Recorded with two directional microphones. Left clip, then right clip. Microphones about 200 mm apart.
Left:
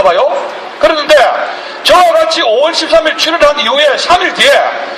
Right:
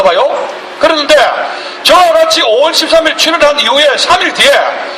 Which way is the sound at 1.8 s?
45° right (ahead or behind).